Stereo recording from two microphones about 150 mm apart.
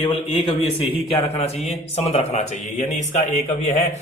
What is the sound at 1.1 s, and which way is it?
A man's voice, 45° left (ahead or behind).